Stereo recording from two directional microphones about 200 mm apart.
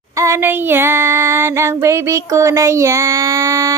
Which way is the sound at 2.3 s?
15° right (ahead or behind).